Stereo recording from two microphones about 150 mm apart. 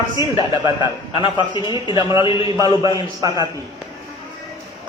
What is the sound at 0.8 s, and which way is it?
A man's voice, 30° left (ahead or behind).